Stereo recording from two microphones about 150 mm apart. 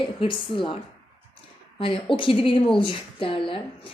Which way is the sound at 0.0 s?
35° left (ahead or behind).